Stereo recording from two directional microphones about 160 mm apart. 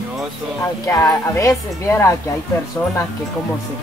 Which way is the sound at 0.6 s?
20° left (ahead or behind).